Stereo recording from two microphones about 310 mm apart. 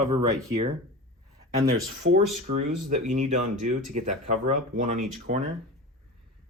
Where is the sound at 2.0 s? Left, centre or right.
Right.